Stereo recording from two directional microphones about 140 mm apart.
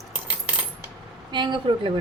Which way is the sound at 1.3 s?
35° right (ahead or behind).